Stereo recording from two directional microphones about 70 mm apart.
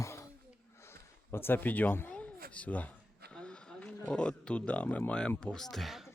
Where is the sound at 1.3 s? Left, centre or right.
Left.